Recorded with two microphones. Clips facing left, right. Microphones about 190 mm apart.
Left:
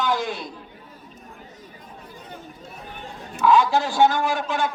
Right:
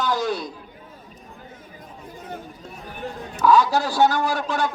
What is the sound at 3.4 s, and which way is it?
Speech, 40° right (ahead or behind).